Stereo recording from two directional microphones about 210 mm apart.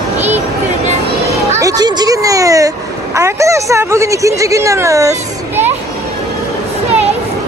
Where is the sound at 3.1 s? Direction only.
15° right (ahead or behind).